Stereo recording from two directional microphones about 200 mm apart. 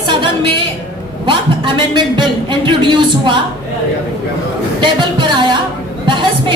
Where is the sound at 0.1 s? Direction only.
25° right (ahead or behind).